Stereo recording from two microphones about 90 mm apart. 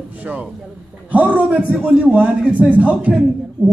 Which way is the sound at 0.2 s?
15° right (ahead or behind).